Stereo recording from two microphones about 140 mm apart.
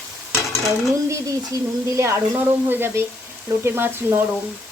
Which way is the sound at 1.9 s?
20° right (ahead or behind).